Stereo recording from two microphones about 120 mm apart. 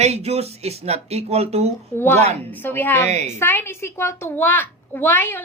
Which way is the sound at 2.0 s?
20° left (ahead or behind).